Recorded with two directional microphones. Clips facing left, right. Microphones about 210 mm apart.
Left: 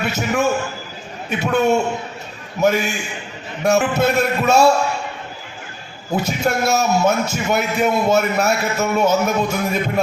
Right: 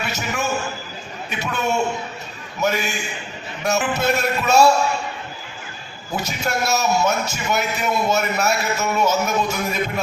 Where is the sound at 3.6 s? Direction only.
55° left (ahead or behind).